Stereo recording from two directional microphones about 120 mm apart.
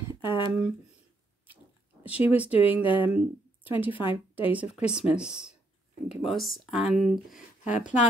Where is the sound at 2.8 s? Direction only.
45° left (ahead or behind).